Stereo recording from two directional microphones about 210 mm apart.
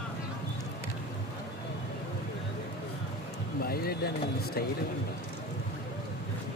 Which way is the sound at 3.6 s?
45° left (ahead or behind).